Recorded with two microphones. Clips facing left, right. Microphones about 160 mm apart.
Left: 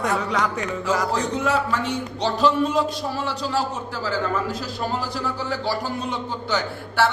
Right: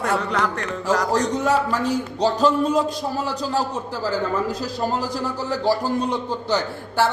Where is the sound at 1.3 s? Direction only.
35° right (ahead or behind).